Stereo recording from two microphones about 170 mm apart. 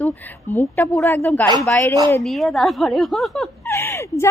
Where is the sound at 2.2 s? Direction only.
Centre (ahead or behind).